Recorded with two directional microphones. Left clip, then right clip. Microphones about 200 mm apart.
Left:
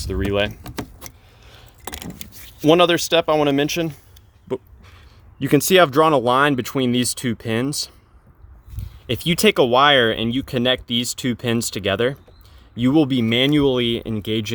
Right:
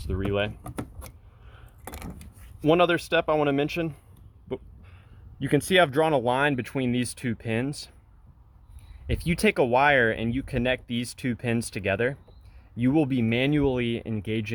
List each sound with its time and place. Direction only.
0.0 s speech: 25° left (ahead or behind)
1.0 s vehicle: 25° left (ahead or behind)
2.6 s speech: 20° left (ahead or behind)
4.4 s a sound: 15° left (ahead or behind)
5.4 s speech: 15° left (ahead or behind)
9.0 s speech: 15° left (ahead or behind)